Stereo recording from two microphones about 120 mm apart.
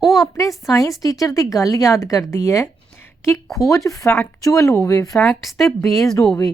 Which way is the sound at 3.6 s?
25° left (ahead or behind).